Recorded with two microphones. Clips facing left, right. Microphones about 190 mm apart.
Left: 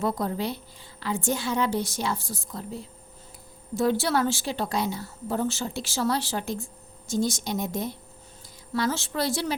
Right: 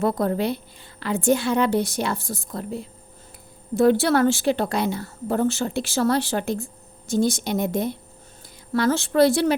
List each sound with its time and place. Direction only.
0.0 s a woman's voice: 60° right (ahead or behind)